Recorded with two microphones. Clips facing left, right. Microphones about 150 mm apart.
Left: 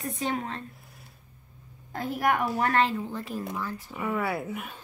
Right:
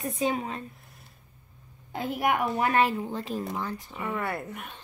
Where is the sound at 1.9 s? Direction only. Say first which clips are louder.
Even; centre (ahead or behind).